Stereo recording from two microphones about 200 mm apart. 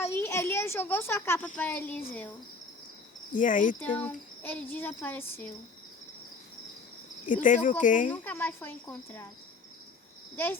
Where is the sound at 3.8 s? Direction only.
10° left (ahead or behind).